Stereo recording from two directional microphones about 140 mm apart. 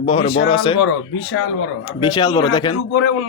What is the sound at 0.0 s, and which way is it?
Speech, 45° left (ahead or behind).